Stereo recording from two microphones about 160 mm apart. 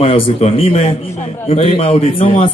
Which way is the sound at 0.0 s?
40° left (ahead or behind).